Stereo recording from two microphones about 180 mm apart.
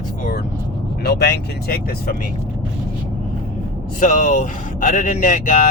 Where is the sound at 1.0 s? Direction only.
60° left (ahead or behind).